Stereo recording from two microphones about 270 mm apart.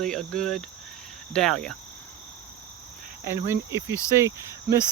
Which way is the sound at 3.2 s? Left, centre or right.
Centre.